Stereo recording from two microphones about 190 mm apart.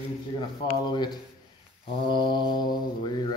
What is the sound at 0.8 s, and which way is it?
Speech, 20° left (ahead or behind).